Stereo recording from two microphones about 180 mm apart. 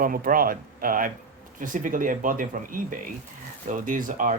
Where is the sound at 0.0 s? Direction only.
50° right (ahead or behind).